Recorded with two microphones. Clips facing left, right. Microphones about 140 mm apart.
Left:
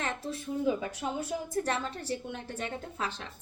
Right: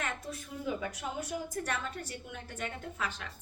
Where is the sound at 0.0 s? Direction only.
30° left (ahead or behind).